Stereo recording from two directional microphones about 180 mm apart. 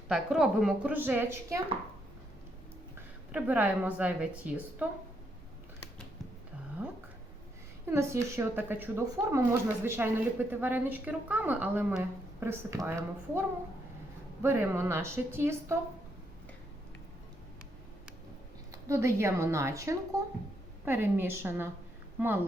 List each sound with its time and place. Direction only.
0.1 s a woman's voice: 5° right (ahead or behind)
3.3 s a woman's voice: 10° right (ahead or behind)
6.8 s a sound: 10° right (ahead or behind)
7.9 s a woman's voice: 15° right (ahead or behind)
14.4 s a woman's voice: 15° right (ahead or behind)
18.7 s a woman's voice: 15° right (ahead or behind)